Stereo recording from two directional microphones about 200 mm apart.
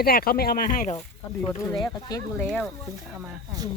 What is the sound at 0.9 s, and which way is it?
Speech, 5° left (ahead or behind).